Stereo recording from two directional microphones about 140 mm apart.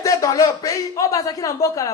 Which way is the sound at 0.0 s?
25° left (ahead or behind).